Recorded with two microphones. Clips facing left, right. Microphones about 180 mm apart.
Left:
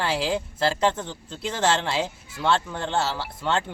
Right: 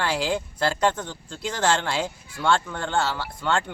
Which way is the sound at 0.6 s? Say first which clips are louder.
Left 1 dB; 30° left (ahead or behind).